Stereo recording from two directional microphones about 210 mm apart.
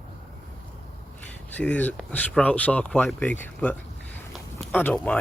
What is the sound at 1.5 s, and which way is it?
Speech, 5° left (ahead or behind).